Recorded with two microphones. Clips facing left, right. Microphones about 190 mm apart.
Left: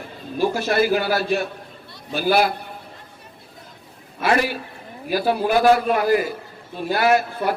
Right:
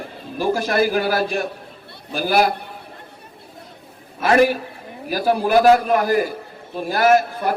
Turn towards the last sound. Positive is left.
turn(degrees=-45)  # may be behind; listen again after turning